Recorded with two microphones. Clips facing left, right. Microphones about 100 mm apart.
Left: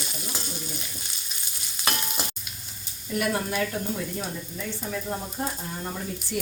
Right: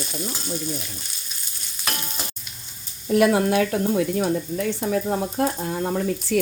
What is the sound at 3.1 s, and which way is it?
Speech, 90° right.